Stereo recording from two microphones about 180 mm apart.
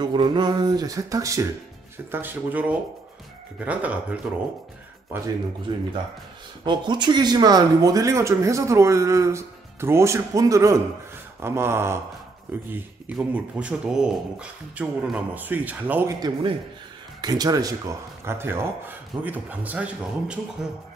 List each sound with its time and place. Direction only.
0.0 s speech: 25° right (ahead or behind)
5.7 s speech: 25° right (ahead or behind); by 16.1 s 10° right (ahead or behind)
16.1 s speech: 20° right (ahead or behind); by 20.3 s 5° right (ahead or behind)